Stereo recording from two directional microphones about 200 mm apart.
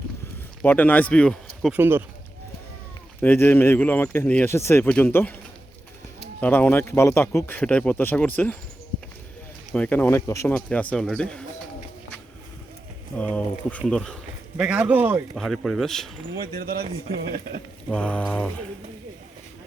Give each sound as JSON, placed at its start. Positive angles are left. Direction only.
{"t": 0.6, "sound": "speech", "side_deg": 10}
{"t": 1.7, "sound": "speech", "side_deg": -10}
{"t": 3.2, "sound": "speech", "side_deg": 10}
{"t": 6.4, "sound": "speech", "side_deg": 10}
{"t": 9.7, "sound": "speech", "side_deg": 5}
{"t": 13.1, "sound": "speech", "side_deg": 5}
{"t": 15.4, "sound": "speech", "side_deg": 0}
{"t": 16.4, "sound": "speech", "side_deg": -50}
{"t": 17.8, "sound": "speech", "side_deg": 5}